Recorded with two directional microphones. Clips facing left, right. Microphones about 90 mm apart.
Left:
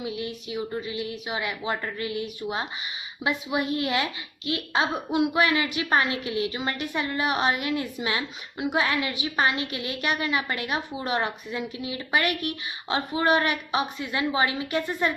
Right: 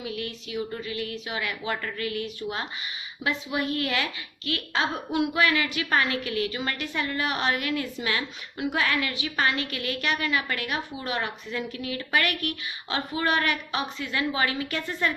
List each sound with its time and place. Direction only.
0.0 s a woman's voice: 20° left (ahead or behind)